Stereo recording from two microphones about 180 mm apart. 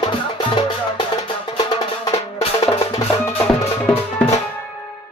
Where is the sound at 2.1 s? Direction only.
35° left (ahead or behind).